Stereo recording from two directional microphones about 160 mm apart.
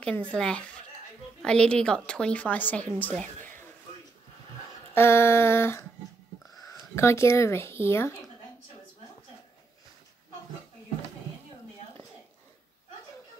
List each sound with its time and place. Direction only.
0.0 s a woman's voice: 5° left (ahead or behind)
4.9 s a woman's voice: 15° left (ahead or behind)